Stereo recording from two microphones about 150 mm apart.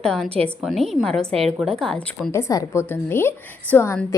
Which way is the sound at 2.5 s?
25° left (ahead or behind).